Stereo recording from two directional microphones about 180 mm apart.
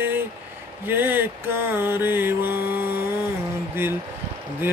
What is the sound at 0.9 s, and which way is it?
Mantra, 10° right (ahead or behind).